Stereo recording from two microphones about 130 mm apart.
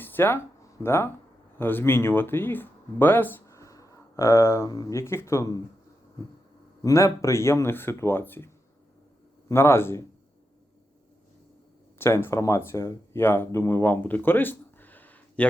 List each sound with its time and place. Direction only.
0.0 s a sound: 15° left (ahead or behind)
1.5 s speech: 15° left (ahead or behind)
6.8 s speech: 25° left (ahead or behind)
9.5 s speech: 20° left (ahead or behind)
11.9 s speech: 20° left (ahead or behind)